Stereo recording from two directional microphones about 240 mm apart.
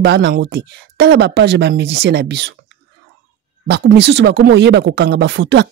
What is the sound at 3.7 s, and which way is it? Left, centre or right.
Speech, right.